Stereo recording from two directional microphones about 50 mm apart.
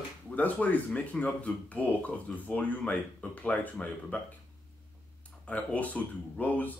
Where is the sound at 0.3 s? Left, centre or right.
Left.